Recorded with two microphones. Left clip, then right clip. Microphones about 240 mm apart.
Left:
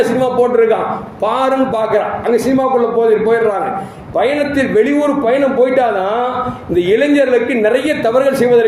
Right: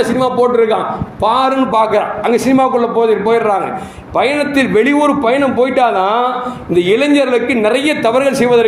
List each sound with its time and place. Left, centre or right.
0.0 s a man's voice: centre